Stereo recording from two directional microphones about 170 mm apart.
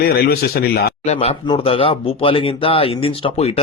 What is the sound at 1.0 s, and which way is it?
Speech, 40° left (ahead or behind).